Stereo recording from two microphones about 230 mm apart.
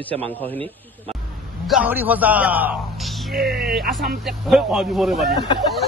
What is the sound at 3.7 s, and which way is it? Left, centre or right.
Speech, centre.